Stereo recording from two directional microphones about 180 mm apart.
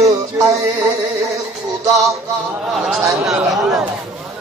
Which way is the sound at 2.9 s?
5° right (ahead or behind).